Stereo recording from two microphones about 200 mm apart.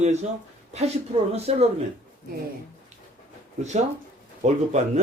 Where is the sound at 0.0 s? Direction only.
35° right (ahead or behind).